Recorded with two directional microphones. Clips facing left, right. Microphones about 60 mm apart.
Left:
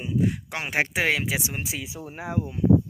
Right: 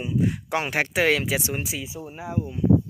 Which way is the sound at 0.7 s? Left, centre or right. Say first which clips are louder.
Right 1 dB; centre.